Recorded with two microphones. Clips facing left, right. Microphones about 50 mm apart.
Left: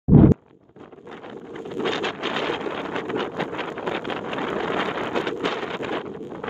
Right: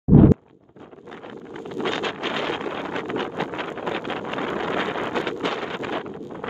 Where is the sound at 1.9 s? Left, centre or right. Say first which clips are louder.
Even; right.